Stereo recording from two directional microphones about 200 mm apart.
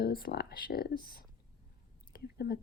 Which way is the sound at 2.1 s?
50° left (ahead or behind).